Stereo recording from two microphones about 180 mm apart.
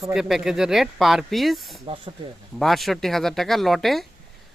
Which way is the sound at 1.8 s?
30° right (ahead or behind).